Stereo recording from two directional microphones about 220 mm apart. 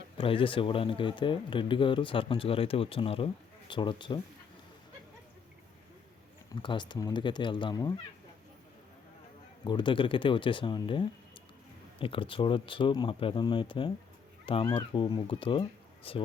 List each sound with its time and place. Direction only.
0.2 s speech: 25° left (ahead or behind)
6.5 s speech: 20° left (ahead or behind)
9.6 s speech: 20° left (ahead or behind)